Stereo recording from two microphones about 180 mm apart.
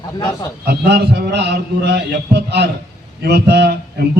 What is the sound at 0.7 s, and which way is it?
A man's voice, 70° right (ahead or behind).